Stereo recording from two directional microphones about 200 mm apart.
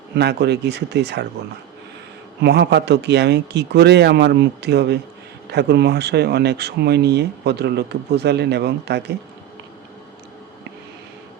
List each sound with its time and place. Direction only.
0.1 s speech: 55° right (ahead or behind)
2.4 s speech: 55° right (ahead or behind)